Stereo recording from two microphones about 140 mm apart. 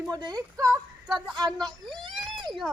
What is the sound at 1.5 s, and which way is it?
A woman's voice, centre (ahead or behind).